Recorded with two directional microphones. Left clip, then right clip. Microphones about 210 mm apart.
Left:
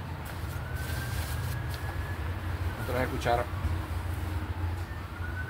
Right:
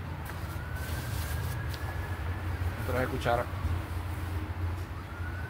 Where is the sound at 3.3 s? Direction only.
15° right (ahead or behind).